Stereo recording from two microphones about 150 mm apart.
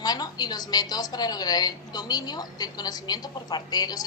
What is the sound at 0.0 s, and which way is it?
A woman's voice, 25° left (ahead or behind).